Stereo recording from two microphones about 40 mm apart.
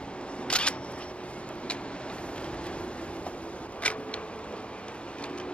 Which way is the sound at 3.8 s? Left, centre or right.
Left.